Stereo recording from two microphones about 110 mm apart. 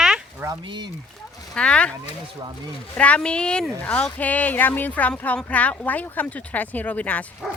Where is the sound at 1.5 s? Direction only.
10° left (ahead or behind).